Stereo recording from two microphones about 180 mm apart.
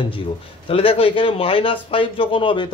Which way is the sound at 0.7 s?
30° left (ahead or behind).